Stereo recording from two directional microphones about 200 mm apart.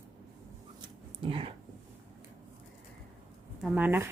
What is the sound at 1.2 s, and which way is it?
Speech, 25° right (ahead or behind).